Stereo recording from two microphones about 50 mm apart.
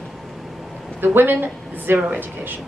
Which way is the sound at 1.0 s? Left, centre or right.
Right.